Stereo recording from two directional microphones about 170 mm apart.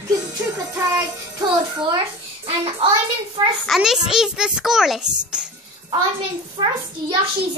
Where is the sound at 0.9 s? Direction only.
25° right (ahead or behind).